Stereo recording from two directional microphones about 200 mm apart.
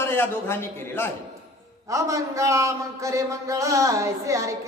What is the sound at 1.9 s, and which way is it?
A man's voice, 15° right (ahead or behind).